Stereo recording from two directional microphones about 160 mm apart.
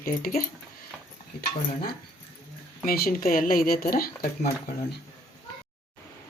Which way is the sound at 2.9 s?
65° left (ahead or behind).